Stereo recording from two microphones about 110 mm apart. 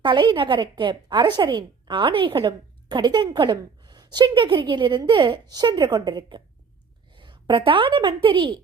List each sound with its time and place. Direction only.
0.0 s a woman's voice: 45° right (ahead or behind)